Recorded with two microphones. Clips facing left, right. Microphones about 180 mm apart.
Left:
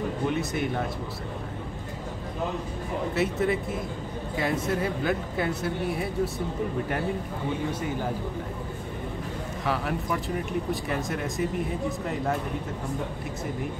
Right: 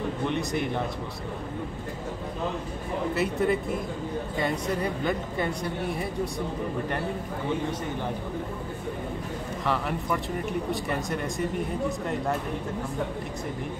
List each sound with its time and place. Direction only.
0.3 s speech: 5° left (ahead or behind)
3.2 s speech: centre (ahead or behind)
9.7 s speech: centre (ahead or behind)